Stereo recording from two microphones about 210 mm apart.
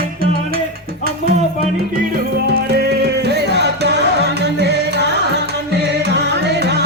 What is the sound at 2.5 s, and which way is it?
Music, 50° right (ahead or behind).